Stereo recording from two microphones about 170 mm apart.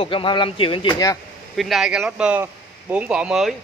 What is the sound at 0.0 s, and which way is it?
Speech, 30° left (ahead or behind).